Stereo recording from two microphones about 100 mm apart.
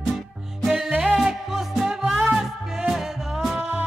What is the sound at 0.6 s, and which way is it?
Music, centre (ahead or behind).